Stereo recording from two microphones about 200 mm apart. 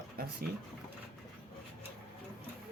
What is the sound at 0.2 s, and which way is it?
Speech, 50° right (ahead or behind).